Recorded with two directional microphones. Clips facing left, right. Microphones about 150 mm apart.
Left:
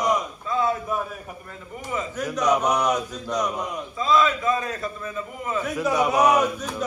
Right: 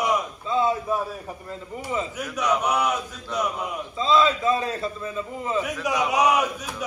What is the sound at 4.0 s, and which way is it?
A man's voice, 25° right (ahead or behind).